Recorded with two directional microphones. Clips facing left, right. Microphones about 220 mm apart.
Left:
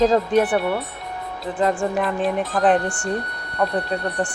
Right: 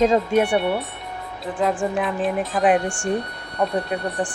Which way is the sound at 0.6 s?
Centre (ahead or behind).